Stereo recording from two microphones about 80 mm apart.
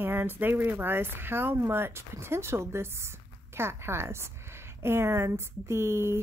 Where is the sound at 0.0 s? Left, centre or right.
Right.